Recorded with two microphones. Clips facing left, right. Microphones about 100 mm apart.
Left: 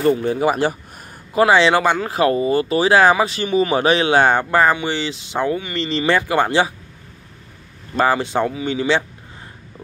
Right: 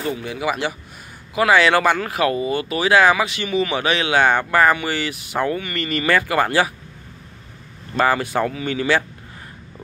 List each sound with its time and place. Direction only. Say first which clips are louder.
0.0 s speech: left 7 dB; 40° left (ahead or behind)
1.3 s speech: left 2 dB; 30° left (ahead or behind)
8.0 s speech: left 1 dB; 20° left (ahead or behind)